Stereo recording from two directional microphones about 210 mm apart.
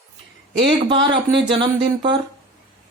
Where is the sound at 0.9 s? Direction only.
25° right (ahead or behind).